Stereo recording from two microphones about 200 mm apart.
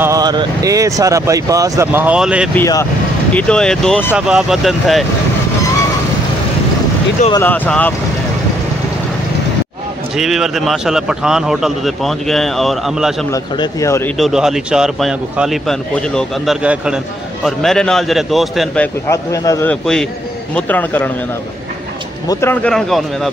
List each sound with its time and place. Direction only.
0.0 s speech: 15° right (ahead or behind)
2.5 s a man's voice: 15° left (ahead or behind)
7.4 s speech: 10° left (ahead or behind)
10.1 s a man's voice: centre (ahead or behind)
13.3 s speech: 15° left (ahead or behind)
14.1 s a man's voice: centre (ahead or behind)
19.0 s speech: 15° left (ahead or behind)
19.7 s a man's voice: 5° left (ahead or behind)
22.3 s a man's voice: 10° left (ahead or behind)